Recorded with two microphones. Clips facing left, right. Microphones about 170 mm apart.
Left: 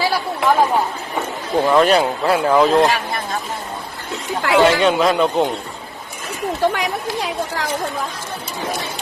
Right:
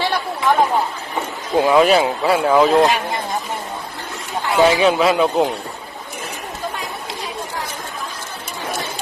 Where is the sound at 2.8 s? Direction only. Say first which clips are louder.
Right 1 dB; 20° right (ahead or behind).